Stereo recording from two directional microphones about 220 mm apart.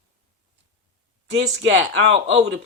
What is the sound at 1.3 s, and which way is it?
Speech, 55° right (ahead or behind).